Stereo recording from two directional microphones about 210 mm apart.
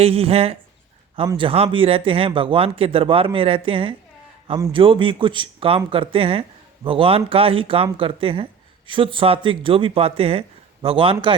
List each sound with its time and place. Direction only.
0.0 s speech: 30° right (ahead or behind)